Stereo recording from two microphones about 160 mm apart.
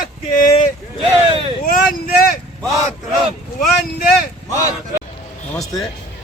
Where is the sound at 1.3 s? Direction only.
35° right (ahead or behind).